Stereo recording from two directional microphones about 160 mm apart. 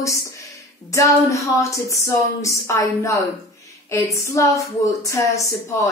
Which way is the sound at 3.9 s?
20° left (ahead or behind).